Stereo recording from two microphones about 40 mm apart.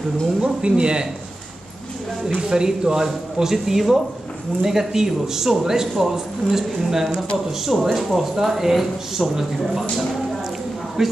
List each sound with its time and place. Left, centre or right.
0.4 s speech: right
2.2 s a man's voice: centre
11.0 s a man's voice: centre